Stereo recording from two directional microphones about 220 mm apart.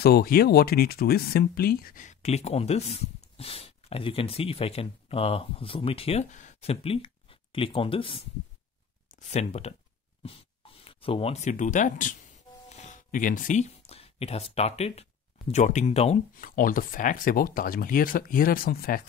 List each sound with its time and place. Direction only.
0.0 s speech: 45° left (ahead or behind)